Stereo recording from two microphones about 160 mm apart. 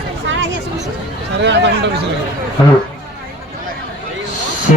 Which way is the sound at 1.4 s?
90° right.